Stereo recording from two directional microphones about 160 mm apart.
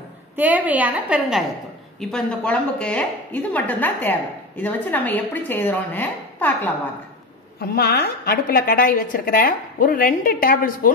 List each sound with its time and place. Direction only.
0.4 s a woman's voice: 10° right (ahead or behind); by 6.7 s 10° left (ahead or behind)
7.7 s a woman's voice: 80° left; by 10.9 s 60° left (ahead or behind)